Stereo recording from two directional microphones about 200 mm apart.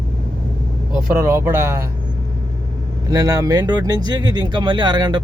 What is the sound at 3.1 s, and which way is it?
Speech, 15° right (ahead or behind).